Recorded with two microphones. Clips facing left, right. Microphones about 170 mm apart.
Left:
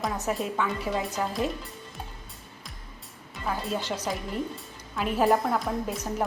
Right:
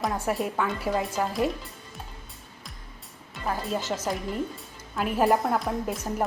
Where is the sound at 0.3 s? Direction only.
5° right (ahead or behind).